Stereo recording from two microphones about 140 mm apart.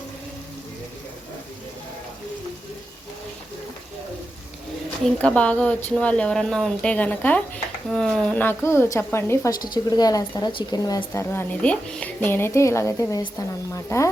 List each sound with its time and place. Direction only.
5.0 s speech: 10° left (ahead or behind)